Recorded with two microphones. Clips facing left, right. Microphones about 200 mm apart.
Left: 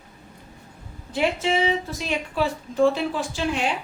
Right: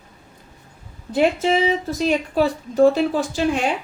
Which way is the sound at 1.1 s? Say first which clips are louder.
Right 5 dB; 45° right (ahead or behind).